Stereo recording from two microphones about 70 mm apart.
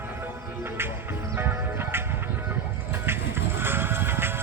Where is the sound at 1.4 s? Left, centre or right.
Right.